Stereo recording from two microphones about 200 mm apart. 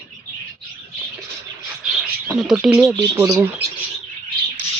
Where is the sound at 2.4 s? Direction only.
5° right (ahead or behind).